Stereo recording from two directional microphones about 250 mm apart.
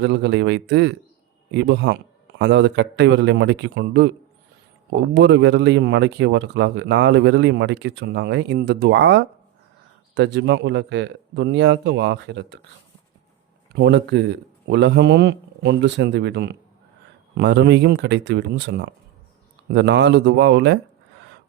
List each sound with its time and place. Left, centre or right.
0.0 s speech: right
5.1 s speech: right
13.7 s speech: right